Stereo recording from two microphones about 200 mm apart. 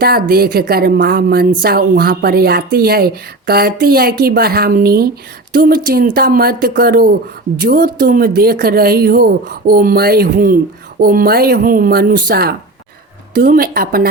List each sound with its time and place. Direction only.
0.0 s a woman's voice: 50° right (ahead or behind)